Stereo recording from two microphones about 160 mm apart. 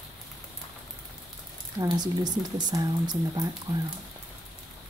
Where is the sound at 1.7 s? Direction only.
25° right (ahead or behind).